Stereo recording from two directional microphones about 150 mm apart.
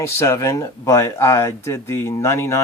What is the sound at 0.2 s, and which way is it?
Speech, 20° left (ahead or behind).